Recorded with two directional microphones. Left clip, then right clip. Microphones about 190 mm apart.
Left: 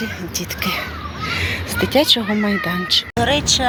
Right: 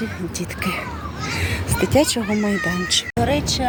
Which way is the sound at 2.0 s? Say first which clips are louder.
Left 5 dB; 15° right (ahead or behind).